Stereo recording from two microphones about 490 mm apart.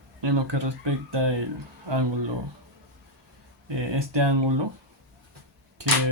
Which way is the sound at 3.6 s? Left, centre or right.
Right.